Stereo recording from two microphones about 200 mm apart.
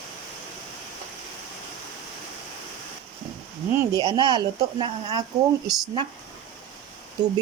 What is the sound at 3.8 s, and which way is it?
Speech, 20° right (ahead or behind).